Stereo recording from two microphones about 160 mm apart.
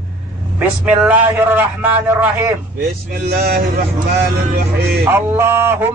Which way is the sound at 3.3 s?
75° right (ahead or behind).